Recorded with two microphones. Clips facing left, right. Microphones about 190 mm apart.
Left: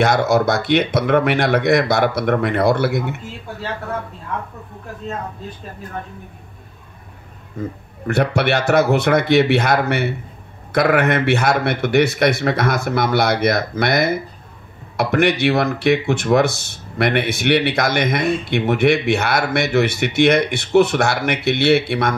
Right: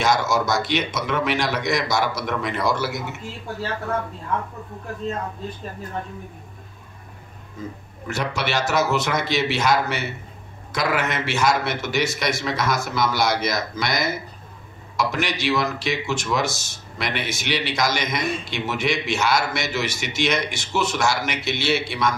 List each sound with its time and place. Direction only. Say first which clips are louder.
0.0 s speech: left 6 dB; 60° left (ahead or behind)
7.6 s speech: left 7 dB; 60° left (ahead or behind)